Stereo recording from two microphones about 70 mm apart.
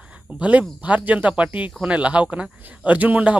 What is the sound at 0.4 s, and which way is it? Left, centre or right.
Speech, centre.